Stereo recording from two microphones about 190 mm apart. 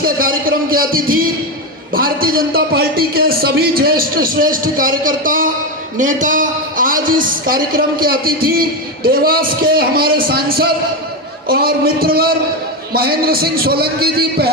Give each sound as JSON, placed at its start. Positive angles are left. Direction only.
{"t": 0.0, "sound": "a man's voice", "side_deg": -50}